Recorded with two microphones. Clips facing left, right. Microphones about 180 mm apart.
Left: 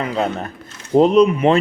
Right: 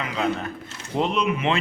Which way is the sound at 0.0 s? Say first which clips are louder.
Left 4 dB; 40° left (ahead or behind).